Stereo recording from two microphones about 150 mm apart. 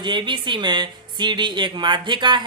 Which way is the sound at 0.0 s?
30° right (ahead or behind).